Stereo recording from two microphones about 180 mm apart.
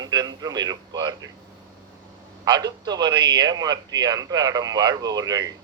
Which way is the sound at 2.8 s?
25° right (ahead or behind).